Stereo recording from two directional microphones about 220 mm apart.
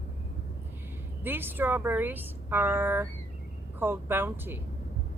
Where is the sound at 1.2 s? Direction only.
10° right (ahead or behind).